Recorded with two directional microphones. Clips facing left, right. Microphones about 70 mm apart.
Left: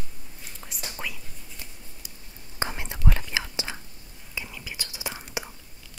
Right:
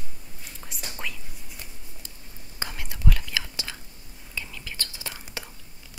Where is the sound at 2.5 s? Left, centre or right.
Left.